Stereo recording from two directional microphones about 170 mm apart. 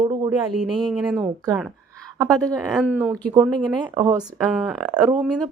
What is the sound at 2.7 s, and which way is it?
Speech, centre (ahead or behind).